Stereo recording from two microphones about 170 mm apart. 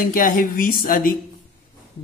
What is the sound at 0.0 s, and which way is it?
A man's voice, 55° left (ahead or behind).